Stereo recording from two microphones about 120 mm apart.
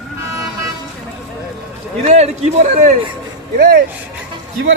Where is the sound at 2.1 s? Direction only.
75° right (ahead or behind).